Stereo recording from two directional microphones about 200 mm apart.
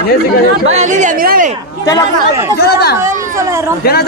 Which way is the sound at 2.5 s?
50° left (ahead or behind).